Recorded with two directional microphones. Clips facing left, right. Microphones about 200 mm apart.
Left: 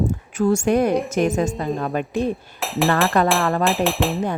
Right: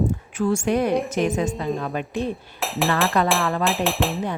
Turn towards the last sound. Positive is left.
turn(degrees=0)  # may be behind; listen again after turning